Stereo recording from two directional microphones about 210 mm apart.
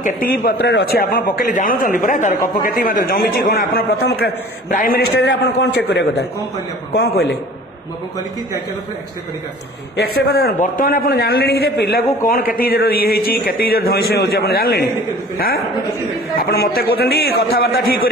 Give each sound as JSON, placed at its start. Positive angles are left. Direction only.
{"t": 0.0, "sound": "a man's voice", "side_deg": 45}
{"t": 9.9, "sound": "a man's voice", "side_deg": 45}